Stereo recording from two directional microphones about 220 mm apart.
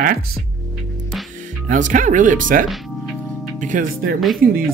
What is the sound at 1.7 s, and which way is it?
Speech, 35° right (ahead or behind).